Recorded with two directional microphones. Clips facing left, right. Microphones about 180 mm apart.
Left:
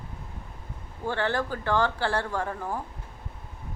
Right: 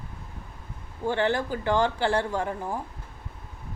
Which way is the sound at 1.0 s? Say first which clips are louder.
Right 3 dB; 15° right (ahead or behind).